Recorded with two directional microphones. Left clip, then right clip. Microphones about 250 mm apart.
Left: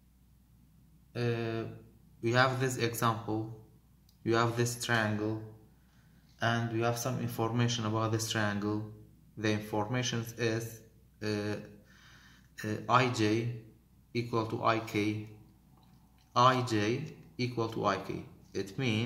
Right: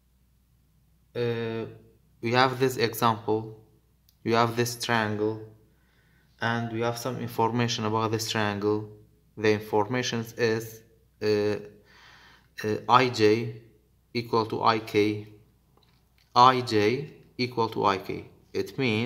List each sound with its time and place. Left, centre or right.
1.1 s a man's voice: right
6.8 s speech: right
10.7 s a sound: right
14.1 s speech: right
16.3 s speech: right